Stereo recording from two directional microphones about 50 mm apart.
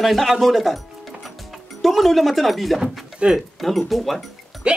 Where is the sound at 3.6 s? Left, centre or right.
Centre.